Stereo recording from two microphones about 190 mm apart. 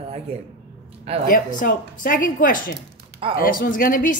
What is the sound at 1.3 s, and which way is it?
A woman's voice, 45° left (ahead or behind).